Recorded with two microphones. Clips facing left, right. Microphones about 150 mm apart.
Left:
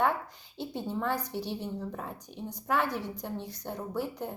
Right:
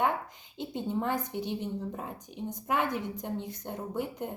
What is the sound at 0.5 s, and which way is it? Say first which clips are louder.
A woman's voice: right 2 dB; 20° right (ahead or behind).